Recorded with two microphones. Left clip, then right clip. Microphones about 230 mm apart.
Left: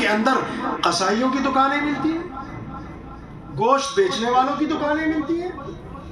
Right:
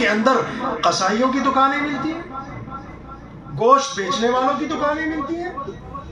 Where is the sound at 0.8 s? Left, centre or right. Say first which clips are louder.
Right 2 dB; left.